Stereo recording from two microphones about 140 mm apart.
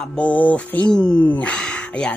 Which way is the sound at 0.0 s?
10° left (ahead or behind).